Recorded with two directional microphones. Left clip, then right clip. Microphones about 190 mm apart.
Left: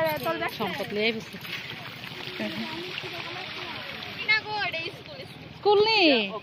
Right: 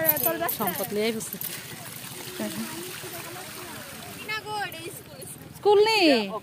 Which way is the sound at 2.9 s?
45° right (ahead or behind).